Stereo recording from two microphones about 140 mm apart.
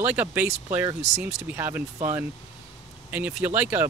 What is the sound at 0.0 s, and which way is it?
Speech, 10° right (ahead or behind).